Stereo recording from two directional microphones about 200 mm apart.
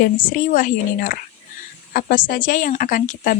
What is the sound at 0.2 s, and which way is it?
A woman's voice, 45° left (ahead or behind).